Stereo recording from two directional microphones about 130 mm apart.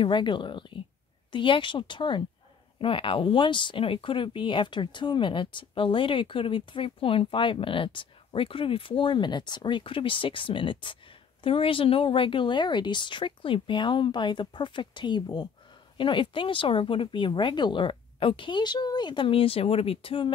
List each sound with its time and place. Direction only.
0.0 s speech: 40° left (ahead or behind)